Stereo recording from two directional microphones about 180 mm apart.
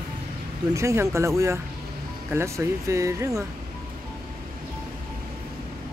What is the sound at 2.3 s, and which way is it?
Speech, 15° right (ahead or behind).